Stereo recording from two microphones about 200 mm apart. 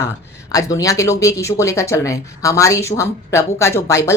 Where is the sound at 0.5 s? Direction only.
15° left (ahead or behind).